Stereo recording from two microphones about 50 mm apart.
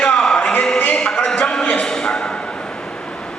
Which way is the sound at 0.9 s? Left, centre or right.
Centre.